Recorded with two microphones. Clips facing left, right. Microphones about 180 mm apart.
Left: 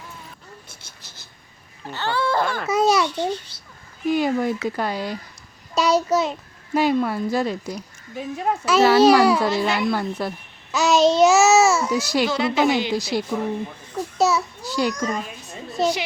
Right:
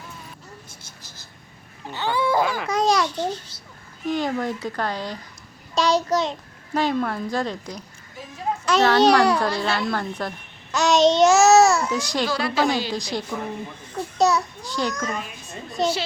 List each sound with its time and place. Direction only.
1.9 s speech: 15° right (ahead or behind)
2.6 s a child's voice: 5° left (ahead or behind)
3.1 s a child's voice: 65° left (ahead or behind)
4.0 s a child's voice: 10° left (ahead or behind)
9.5 s a child's voice: 15° left (ahead or behind)
12.3 s a woman's voice: 20° left (ahead or behind)
13.3 s a child's voice: 5° left (ahead or behind)